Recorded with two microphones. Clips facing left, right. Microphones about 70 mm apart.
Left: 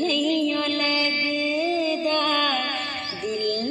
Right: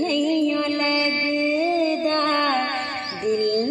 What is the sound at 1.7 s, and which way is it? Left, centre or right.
Music, right.